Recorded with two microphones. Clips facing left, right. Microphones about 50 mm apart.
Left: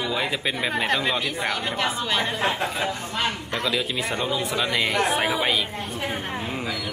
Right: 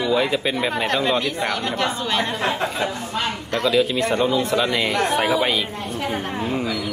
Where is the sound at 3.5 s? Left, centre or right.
Centre.